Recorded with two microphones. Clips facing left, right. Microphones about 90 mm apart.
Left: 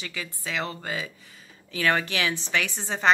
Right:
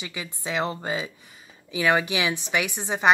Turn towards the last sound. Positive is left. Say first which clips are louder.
# right 2 dB
turn(degrees=-15)  # may be behind; listen again after turning